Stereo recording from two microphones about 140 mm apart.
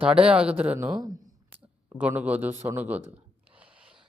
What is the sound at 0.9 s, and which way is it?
Speech, 25° right (ahead or behind).